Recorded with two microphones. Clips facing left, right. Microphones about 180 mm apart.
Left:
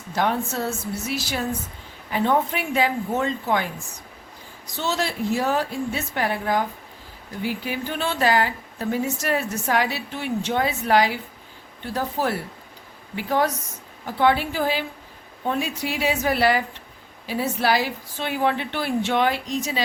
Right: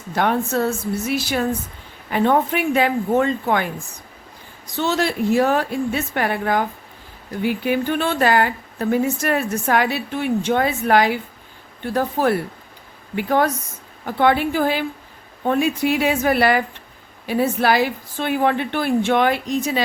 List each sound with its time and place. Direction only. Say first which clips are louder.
0.2 s speech: right 4 dB; 60° right (ahead or behind)